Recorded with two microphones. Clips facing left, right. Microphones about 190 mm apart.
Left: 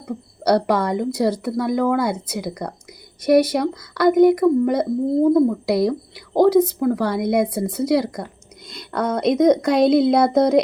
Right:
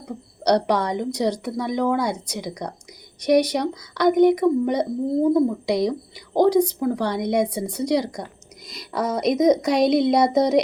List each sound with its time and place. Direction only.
0.4 s speech: 5° left (ahead or behind)